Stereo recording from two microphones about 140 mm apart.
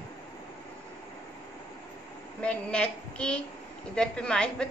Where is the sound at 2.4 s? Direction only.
5° left (ahead or behind).